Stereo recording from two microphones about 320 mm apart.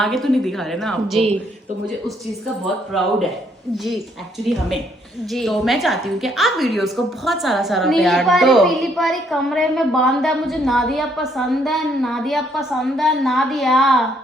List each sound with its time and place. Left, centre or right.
0.0 s a woman's voice: centre
2.6 s a woman's voice: centre
5.3 s a woman's voice: centre